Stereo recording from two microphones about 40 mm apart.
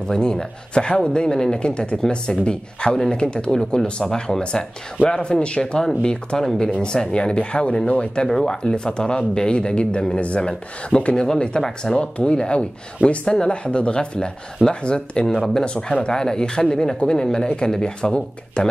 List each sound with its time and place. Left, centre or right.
0.1 s speech: centre
4.0 s speech: centre
4.4 s speech: left